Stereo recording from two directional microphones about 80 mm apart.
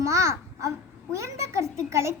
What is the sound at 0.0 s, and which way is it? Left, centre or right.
Babbling, right.